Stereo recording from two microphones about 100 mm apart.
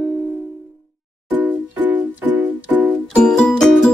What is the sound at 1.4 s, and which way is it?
Music, 20° right (ahead or behind).